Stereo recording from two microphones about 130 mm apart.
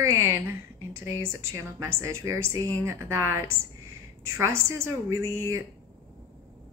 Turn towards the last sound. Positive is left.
turn(degrees=-20)  # may be behind; listen again after turning